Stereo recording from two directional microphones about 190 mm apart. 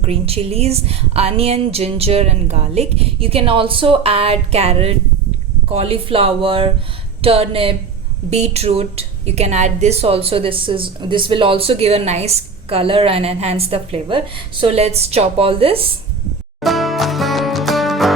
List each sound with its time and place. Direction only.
0.0 s a woman's voice: 30° right (ahead or behind)
16.6 s music: centre (ahead or behind)